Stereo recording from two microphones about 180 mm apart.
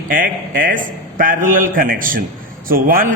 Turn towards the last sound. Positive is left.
turn(degrees=-50)  # may be behind; listen again after turning